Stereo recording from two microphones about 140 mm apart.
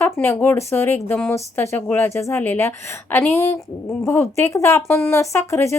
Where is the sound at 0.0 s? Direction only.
15° left (ahead or behind).